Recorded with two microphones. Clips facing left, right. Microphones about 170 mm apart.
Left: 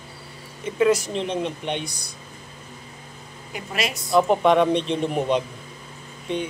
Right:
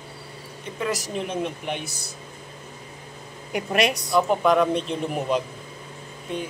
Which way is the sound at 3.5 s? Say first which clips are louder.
Right 6 dB; 70° right (ahead or behind).